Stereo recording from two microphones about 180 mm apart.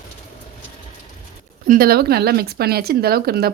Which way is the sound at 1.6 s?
55° right (ahead or behind).